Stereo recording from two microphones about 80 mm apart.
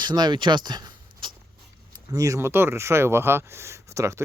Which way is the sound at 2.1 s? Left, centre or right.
Right.